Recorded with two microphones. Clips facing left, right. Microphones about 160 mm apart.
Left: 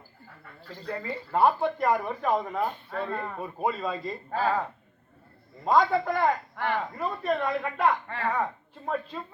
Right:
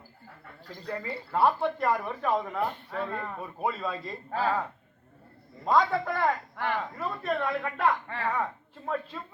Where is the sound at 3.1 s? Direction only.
10° left (ahead or behind).